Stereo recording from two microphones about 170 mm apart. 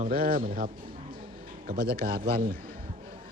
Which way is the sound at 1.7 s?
55° right (ahead or behind).